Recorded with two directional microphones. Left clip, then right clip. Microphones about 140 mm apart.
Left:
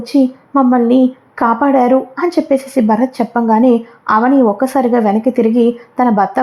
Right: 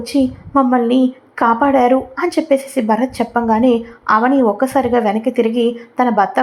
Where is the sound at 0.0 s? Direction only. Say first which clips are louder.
Left 3 dB; 25° left (ahead or behind).